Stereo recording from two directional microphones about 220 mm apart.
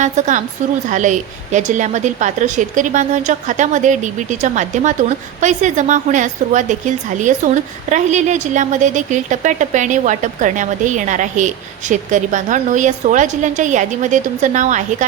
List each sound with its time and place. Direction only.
0.0 s a woman's voice: 35° right (ahead or behind)